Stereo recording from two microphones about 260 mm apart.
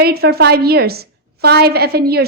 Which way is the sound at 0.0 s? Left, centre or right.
Right.